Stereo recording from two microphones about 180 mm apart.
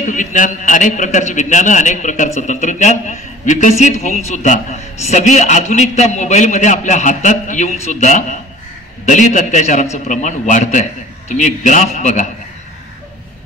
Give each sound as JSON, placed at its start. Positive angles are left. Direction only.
{"t": 0.0, "sound": "a man's voice", "side_deg": 45}